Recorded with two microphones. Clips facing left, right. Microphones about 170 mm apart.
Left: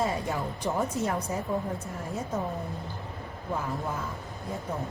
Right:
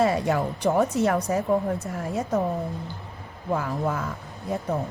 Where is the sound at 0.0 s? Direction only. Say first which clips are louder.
Right 7 dB; 75° right (ahead or behind).